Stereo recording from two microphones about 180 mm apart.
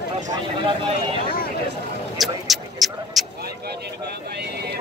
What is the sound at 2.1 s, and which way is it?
Speech, centre (ahead or behind).